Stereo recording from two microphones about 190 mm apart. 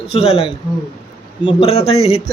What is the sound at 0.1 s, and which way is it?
Speech, 30° left (ahead or behind).